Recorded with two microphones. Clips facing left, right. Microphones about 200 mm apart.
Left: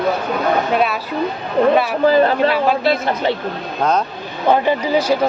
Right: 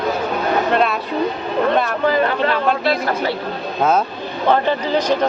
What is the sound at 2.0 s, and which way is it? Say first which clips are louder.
Speech: left 6 dB; 30° left (ahead or behind).